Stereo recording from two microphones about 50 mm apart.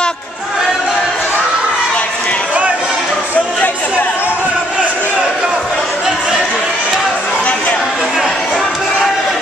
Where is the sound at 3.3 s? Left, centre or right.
Left.